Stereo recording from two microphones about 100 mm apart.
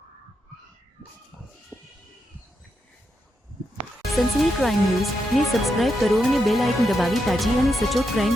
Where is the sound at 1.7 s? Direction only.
25° left (ahead or behind).